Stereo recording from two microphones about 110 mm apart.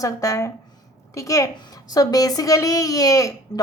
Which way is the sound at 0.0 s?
30° left (ahead or behind).